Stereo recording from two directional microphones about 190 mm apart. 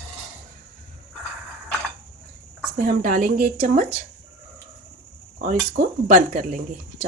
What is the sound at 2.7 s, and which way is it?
Speech, 45° right (ahead or behind).